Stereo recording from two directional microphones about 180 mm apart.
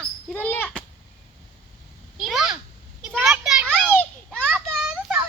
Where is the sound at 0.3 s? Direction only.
10° left (ahead or behind).